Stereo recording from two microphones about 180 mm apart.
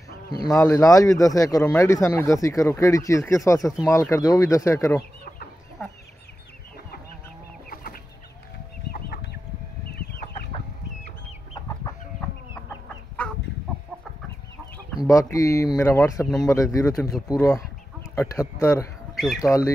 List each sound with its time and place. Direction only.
0.5 s a man's voice: 15° left (ahead or behind)
7.7 s chicken: 55° left (ahead or behind)
15.0 s a man's voice: 15° left (ahead or behind)
19.1 s speech: centre (ahead or behind)
19.4 s a man's voice: 20° left (ahead or behind)